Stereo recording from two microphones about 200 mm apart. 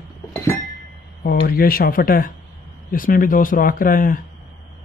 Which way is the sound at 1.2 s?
45° left (ahead or behind).